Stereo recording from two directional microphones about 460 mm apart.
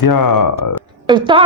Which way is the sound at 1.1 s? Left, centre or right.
Centre.